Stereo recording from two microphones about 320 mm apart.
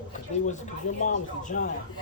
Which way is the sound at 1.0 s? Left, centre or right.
Left.